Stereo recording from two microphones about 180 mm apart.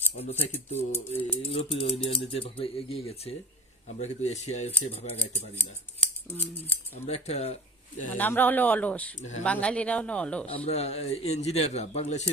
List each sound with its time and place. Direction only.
0.4 s speech: 35° left (ahead or behind)
0.9 s speech: 10° left (ahead or behind)
1.4 s speech: 30° left (ahead or behind)
6.2 s speech: 10° left (ahead or behind)
7.0 s speech: 35° left (ahead or behind)
8.1 s speech: 10° left (ahead or behind)
10.4 s speech: 35° left (ahead or behind)